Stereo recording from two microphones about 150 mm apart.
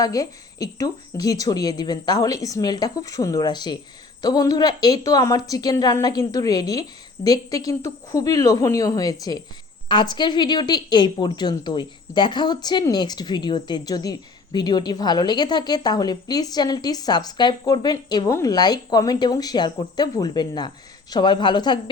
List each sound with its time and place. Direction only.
0.0 s a woman's voice: 25° left (ahead or behind)